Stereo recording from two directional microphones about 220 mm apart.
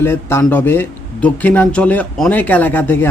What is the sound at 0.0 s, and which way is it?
Speech, 10° left (ahead or behind).